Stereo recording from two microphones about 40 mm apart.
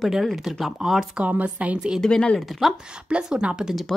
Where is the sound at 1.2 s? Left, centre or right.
Right.